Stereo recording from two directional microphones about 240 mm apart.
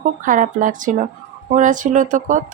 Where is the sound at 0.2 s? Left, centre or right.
Right.